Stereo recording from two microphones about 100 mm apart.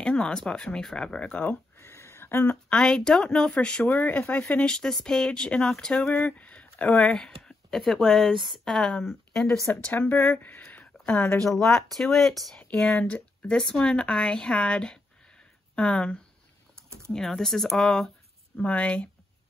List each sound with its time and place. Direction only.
0.0 s speech: 10° left (ahead or behind)
1.8 s a sound: 25° left (ahead or behind)
2.5 s speech: 5° left (ahead or behind)
9.7 s speech: 15° left (ahead or behind)
10.6 s a sound: 10° left (ahead or behind)
11.4 s speech: 5° left (ahead or behind)
12.5 s speech: 15° left (ahead or behind)